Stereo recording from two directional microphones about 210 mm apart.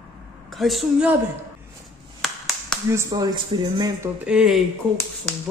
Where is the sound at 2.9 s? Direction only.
15° right (ahead or behind).